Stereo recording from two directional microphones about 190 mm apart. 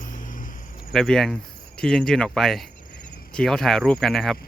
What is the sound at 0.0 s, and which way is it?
Cricket, 45° left (ahead or behind).